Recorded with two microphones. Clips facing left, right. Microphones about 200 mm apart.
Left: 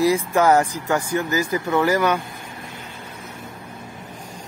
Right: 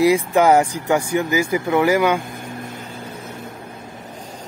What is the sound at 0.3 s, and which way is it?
Speech, 15° right (ahead or behind).